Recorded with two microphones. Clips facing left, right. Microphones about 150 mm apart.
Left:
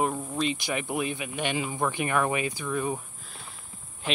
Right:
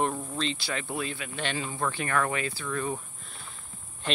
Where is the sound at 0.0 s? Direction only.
10° left (ahead or behind).